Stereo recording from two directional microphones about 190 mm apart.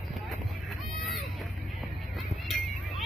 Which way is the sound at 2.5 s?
Centre (ahead or behind).